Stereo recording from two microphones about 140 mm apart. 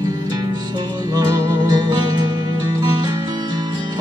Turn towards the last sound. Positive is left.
turn(degrees=-30)  # may be behind; listen again after turning